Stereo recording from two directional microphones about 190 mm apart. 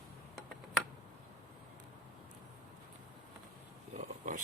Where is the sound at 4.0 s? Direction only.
45° right (ahead or behind).